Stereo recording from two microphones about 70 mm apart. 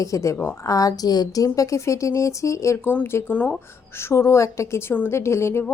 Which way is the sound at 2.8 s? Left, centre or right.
Left.